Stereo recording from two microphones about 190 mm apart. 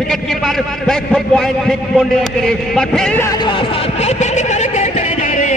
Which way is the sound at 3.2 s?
25° left (ahead or behind).